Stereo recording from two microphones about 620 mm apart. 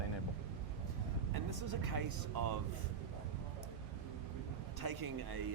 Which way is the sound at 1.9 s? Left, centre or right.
Right.